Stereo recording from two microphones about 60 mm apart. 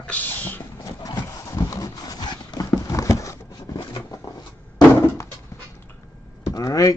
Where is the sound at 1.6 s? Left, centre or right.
Left.